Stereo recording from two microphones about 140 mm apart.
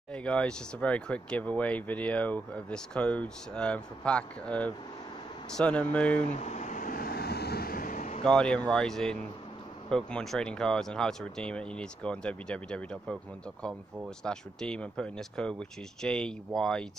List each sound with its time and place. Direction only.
0.1 s speech: 5° left (ahead or behind)
6.3 s vehicle: 55° left (ahead or behind)
8.2 s speech: 5° left (ahead or behind)